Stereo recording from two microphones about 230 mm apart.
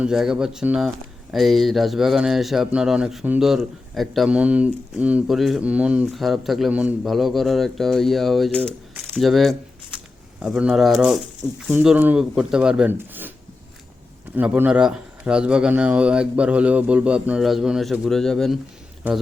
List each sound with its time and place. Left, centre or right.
0.0 s speech: centre
14.3 s speech: centre